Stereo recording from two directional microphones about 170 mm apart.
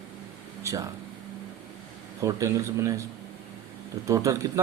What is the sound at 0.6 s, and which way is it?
Speech, 20° right (ahead or behind).